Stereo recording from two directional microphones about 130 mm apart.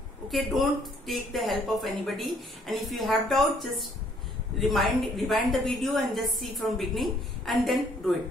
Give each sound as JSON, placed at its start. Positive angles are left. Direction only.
{"t": 0.3, "sound": "speech", "side_deg": 0}